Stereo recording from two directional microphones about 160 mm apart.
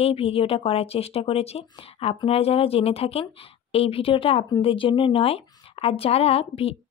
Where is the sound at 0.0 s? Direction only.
35° left (ahead or behind).